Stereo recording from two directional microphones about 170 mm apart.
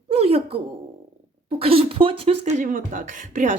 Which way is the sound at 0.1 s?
35° right (ahead or behind).